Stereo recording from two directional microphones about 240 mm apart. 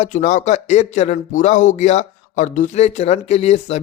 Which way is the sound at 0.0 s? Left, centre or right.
Left.